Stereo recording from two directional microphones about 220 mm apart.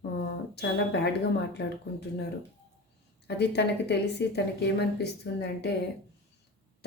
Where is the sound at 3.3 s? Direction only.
50° left (ahead or behind).